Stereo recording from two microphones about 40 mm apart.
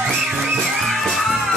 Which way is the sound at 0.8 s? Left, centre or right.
Centre.